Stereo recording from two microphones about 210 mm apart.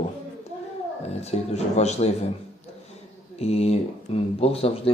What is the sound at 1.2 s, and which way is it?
Speech, 30° left (ahead or behind).